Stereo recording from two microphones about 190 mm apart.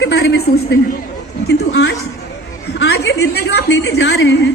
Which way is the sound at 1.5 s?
65° left (ahead or behind).